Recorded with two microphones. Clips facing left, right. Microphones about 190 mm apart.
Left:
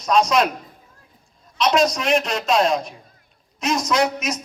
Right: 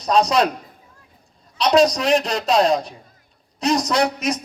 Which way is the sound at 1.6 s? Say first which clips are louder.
Right 3 dB; 35° right (ahead or behind).